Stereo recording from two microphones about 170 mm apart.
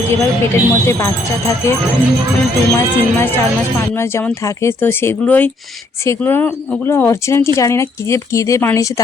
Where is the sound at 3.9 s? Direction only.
15° left (ahead or behind).